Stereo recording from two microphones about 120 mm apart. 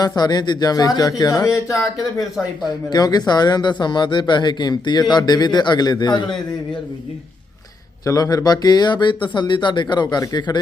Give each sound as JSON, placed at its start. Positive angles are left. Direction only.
{"t": 0.2, "sound": "speech", "side_deg": 35}
{"t": 2.1, "sound": "speech", "side_deg": 0}
{"t": 2.6, "sound": "speech", "side_deg": 35}
{"t": 8.0, "sound": "speech", "side_deg": 30}